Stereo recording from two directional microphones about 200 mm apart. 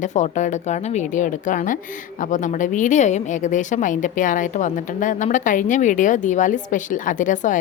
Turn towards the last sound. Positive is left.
turn(degrees=40)  # may be behind; listen again after turning